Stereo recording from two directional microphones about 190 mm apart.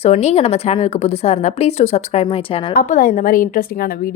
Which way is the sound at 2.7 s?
45° left (ahead or behind).